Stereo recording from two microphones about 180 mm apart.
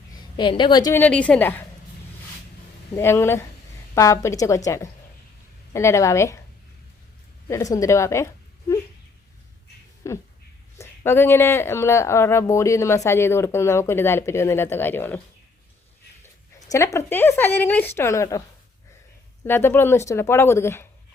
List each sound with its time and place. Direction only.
0.2 s a woman's voice: 25° left (ahead or behind)
0.9 s speech: 10° left (ahead or behind)
2.9 s speech: 15° left (ahead or behind)
7.4 s speech: 20° left (ahead or behind)
10.0 s speech: 15° left (ahead or behind)
16.7 s speech: 15° left (ahead or behind)
19.5 s speech: 10° left (ahead or behind)